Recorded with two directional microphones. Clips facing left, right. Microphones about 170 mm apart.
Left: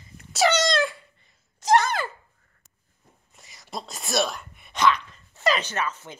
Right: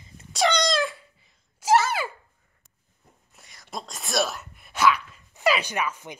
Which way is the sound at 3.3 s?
Centre (ahead or behind).